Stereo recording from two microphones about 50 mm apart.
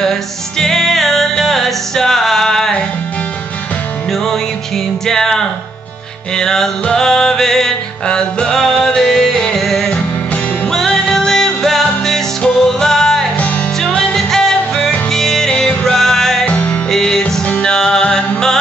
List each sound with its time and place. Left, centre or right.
0.0 s music: centre
4.1 s music: centre
10.9 s music: centre
16.4 s music: left
16.9 s music: centre
17.5 s music: left
17.7 s music: centre